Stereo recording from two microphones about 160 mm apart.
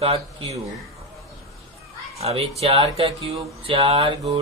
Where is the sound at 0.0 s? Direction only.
40° right (ahead or behind).